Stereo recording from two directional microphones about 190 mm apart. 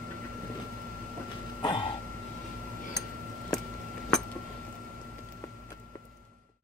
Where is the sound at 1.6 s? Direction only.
25° left (ahead or behind).